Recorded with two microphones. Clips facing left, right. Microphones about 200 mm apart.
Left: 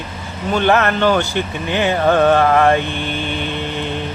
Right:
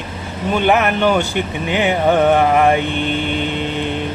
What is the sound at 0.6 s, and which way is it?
Speech, 15° right (ahead or behind).